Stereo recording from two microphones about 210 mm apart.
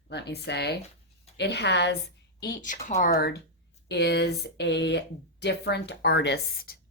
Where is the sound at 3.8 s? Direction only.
55° left (ahead or behind).